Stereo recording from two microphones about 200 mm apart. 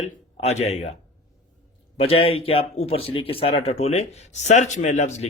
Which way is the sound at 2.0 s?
30° left (ahead or behind).